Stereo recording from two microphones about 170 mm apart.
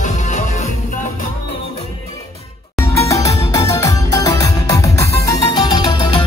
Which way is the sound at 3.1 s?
20° left (ahead or behind).